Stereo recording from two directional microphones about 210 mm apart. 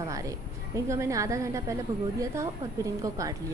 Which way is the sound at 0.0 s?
15° right (ahead or behind).